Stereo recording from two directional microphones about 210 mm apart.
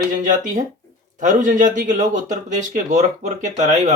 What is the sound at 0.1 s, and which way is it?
Speech, 35° right (ahead or behind).